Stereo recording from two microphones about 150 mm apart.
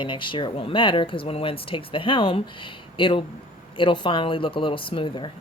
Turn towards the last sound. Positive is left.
turn(degrees=35)  # may be behind; listen again after turning